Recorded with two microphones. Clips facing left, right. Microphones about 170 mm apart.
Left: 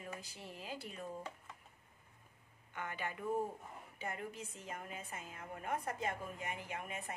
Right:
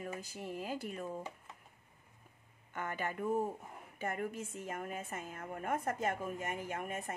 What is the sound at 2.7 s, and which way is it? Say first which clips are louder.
A woman's voice: right 4 dB; 45° right (ahead or behind).